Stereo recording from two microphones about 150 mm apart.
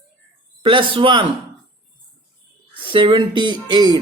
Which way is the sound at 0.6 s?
35° right (ahead or behind).